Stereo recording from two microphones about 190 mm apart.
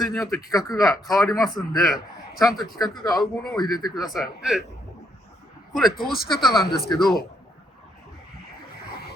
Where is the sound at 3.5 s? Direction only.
20° left (ahead or behind).